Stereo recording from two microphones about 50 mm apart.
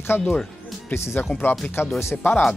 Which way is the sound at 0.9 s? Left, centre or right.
Left.